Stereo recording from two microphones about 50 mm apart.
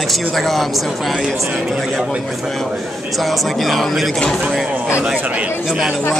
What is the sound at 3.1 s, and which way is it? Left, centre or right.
A man's voice, centre.